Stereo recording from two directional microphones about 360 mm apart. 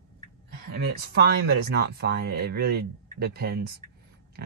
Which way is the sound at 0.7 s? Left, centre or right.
Right.